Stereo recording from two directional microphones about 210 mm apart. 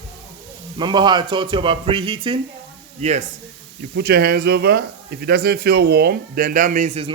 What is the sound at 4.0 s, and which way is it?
Speech, 50° right (ahead or behind).